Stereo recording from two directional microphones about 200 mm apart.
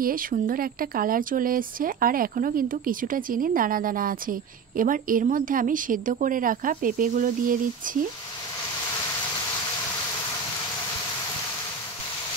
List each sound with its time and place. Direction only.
0.0 s speech: 45° right (ahead or behind)